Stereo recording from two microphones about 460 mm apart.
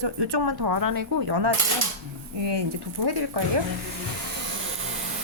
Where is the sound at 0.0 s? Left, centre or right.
Right.